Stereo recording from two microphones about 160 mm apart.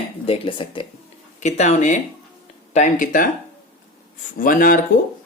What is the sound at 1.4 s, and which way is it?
Speech, 45° left (ahead or behind).